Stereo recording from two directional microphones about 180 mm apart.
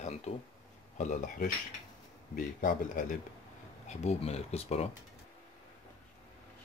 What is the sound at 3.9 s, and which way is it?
Speech, 35° left (ahead or behind).